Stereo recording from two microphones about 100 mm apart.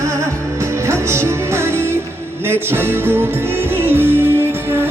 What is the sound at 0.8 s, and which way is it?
Music, 25° right (ahead or behind).